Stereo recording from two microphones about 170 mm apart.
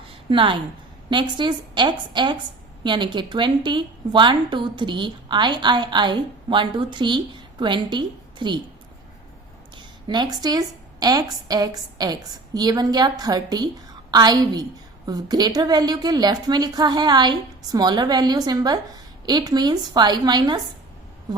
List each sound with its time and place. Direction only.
0.3 s a woman's voice: 30° right (ahead or behind)
9.7 s a sound: 25° right (ahead or behind)
11.0 s a woman's voice: 20° right (ahead or behind)